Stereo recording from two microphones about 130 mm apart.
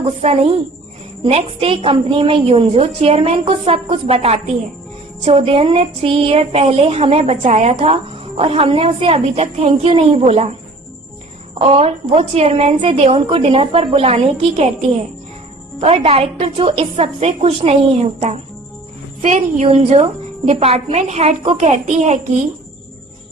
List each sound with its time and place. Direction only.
0.2 s a woman's voice: 50° right (ahead or behind)
11.6 s a woman's voice: 45° right (ahead or behind)
21.6 s a child's voice: 60° right (ahead or behind)